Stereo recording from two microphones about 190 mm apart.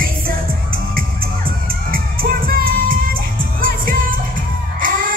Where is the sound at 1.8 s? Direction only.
50° right (ahead or behind).